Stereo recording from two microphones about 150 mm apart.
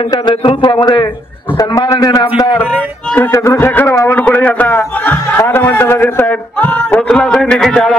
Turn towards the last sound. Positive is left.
turn(degrees=5)  # may be behind; listen again after turning